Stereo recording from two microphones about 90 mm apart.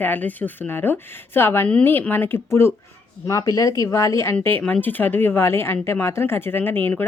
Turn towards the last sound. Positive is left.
turn(degrees=25)  # may be behind; listen again after turning